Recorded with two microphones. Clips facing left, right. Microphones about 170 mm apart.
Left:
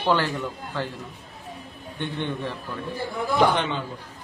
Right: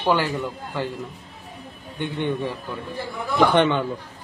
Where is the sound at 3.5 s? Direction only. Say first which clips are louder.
Right 7 dB; 65° right (ahead or behind).